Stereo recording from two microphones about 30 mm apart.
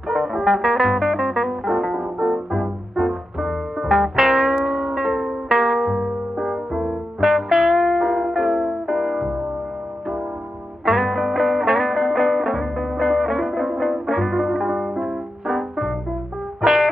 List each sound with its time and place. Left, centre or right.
0.1 s music: right
6.0 s music: centre
7.2 s music: right
10.9 s music: right